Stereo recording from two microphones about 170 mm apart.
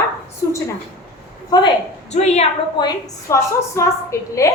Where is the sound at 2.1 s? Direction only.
40° left (ahead or behind).